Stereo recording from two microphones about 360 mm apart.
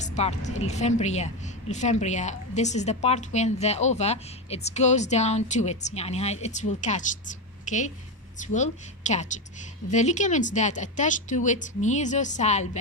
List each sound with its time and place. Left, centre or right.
0.0 s a woman's voice: centre